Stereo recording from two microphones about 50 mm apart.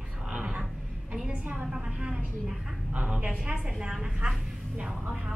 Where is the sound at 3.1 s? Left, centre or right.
Centre.